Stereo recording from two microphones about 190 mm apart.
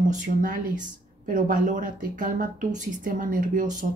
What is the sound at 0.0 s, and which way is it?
Speech, 40° right (ahead or behind).